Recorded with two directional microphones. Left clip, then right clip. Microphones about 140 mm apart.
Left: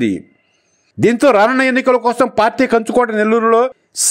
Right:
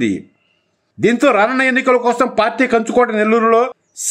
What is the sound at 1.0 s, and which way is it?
A man's voice, 40° left (ahead or behind).